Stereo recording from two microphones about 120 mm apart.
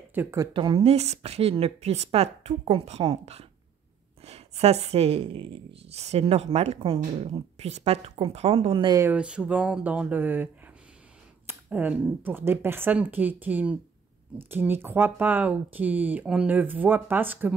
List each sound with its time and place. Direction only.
0.1 s speech: 20° right (ahead or behind)
0.5 s speech: 45° right (ahead or behind)
0.8 s a woman's voice: 65° right (ahead or behind)
8.8 s speech: 30° right (ahead or behind)
9.1 s speech: 10° right (ahead or behind)